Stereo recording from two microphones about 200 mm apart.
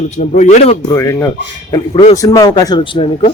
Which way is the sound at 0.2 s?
35° left (ahead or behind).